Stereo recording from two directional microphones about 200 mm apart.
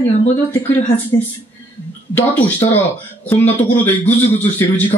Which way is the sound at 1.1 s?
20° left (ahead or behind).